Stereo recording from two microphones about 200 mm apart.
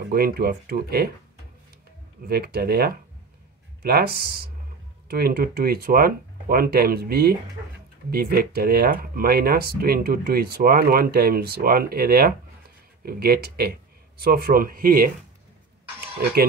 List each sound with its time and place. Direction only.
0.1 s speech: 50° right (ahead or behind)
2.2 s speech: 50° right (ahead or behind)